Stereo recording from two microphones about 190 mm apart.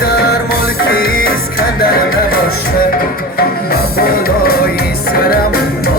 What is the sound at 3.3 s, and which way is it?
Music, 55° left (ahead or behind).